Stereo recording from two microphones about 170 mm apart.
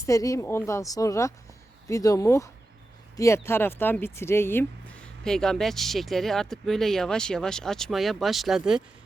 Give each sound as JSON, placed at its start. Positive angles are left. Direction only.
{"t": 0.0, "sound": "speech", "side_deg": 20}